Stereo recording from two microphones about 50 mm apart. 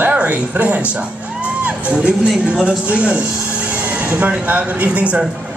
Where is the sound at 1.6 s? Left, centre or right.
Right.